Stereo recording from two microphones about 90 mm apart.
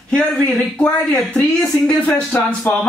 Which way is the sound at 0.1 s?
10° left (ahead or behind).